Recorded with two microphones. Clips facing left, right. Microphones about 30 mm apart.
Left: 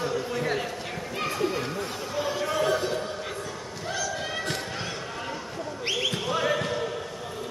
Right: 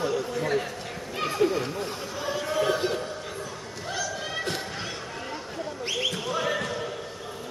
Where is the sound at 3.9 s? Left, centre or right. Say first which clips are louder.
Left 1 dB; centre.